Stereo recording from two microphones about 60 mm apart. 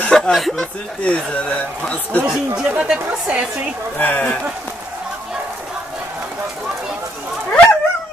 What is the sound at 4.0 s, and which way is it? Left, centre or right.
Speech, left.